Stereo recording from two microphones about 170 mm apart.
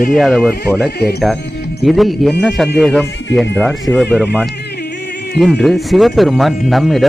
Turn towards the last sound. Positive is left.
turn(degrees=0)  # may be behind; listen again after turning